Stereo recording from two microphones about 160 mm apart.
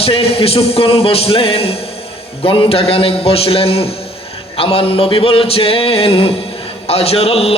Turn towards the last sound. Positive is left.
turn(degrees=40)  # may be behind; listen again after turning